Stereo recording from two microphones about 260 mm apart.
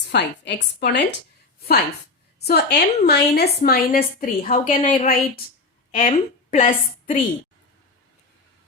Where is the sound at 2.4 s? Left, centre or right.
Left.